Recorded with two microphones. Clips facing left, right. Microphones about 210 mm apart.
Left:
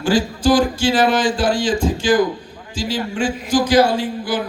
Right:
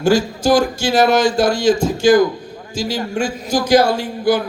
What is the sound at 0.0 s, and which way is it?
A man's voice, 45° right (ahead or behind).